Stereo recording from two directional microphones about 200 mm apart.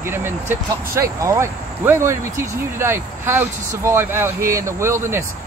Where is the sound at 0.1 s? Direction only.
10° right (ahead or behind).